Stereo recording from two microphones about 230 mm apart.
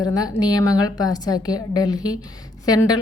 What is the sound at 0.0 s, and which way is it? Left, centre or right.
A woman's voice, centre.